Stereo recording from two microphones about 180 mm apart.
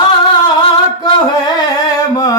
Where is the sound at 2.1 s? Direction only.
20° left (ahead or behind).